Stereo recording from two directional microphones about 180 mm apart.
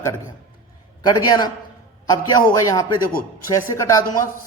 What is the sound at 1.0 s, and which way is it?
A man's voice, 20° left (ahead or behind).